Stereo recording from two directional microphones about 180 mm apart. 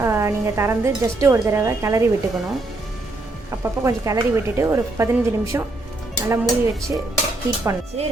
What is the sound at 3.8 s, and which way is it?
A woman's voice, 15° right (ahead or behind).